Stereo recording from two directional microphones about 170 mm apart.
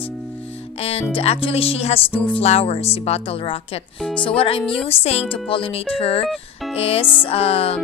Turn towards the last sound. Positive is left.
turn(degrees=35)  # may be behind; listen again after turning